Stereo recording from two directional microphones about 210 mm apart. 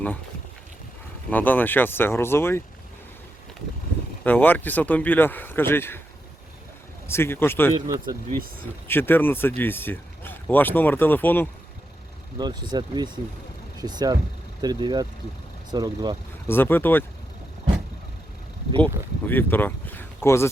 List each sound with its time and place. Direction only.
1.3 s speech: 10° left (ahead or behind)
4.2 s speech: 10° left (ahead or behind)
7.1 s speech: 10° left (ahead or behind)
7.8 s speech: 15° right (ahead or behind)
8.9 s speech: 10° left (ahead or behind)
12.4 s speech: 20° right (ahead or behind)
16.5 s speech: 10° left (ahead or behind)
19.3 s speech: 10° left (ahead or behind)